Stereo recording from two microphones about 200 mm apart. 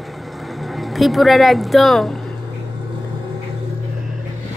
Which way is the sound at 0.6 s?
Centre (ahead or behind).